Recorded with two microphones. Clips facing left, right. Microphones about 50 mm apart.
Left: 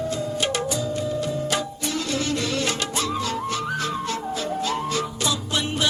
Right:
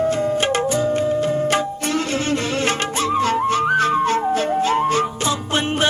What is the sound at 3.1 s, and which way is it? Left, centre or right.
Music, right.